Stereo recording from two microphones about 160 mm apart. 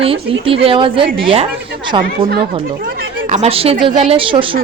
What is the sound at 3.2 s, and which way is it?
A woman's voice, 45° right (ahead or behind).